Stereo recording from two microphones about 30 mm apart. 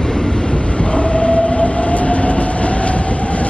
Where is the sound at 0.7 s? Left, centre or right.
Left.